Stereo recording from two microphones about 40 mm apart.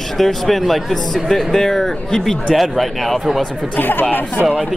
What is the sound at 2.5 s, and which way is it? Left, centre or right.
Speech, centre.